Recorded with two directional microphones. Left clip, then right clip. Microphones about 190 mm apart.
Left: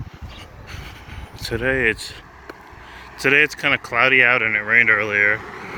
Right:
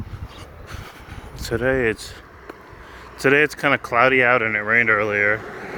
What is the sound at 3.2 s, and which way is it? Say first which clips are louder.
Speech: even; 65° right (ahead or behind).